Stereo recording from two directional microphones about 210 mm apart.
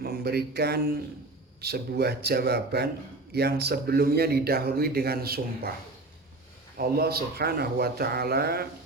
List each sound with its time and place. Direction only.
0.0 s a sound: 50° right (ahead or behind)
1.6 s a man's voice: 50° right (ahead or behind)
6.7 s a man's voice: 45° right (ahead or behind)